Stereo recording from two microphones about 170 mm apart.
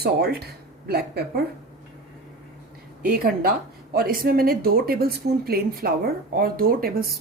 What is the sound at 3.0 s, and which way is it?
A woman's voice, 60° right (ahead or behind).